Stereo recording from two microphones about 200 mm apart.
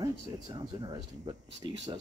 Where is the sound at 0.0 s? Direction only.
25° right (ahead or behind).